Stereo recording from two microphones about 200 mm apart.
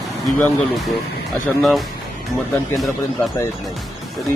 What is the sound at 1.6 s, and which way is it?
Speech, centre (ahead or behind).